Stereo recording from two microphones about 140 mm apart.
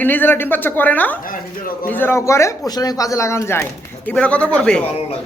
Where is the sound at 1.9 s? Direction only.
15° left (ahead or behind).